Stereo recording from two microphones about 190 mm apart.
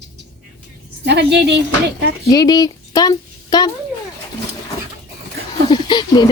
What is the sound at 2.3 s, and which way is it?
A woman's voice, 20° left (ahead or behind).